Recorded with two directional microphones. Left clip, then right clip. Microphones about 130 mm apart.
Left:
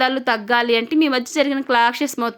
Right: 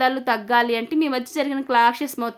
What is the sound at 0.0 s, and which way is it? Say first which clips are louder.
A woman's voice: left 2 dB; 25° left (ahead or behind).